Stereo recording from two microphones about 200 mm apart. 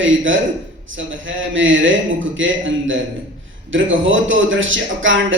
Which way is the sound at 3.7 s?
70° right (ahead or behind).